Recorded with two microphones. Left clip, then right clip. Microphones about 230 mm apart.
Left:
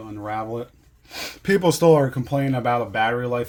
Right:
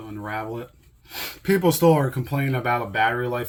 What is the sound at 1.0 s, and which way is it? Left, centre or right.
Speech, left.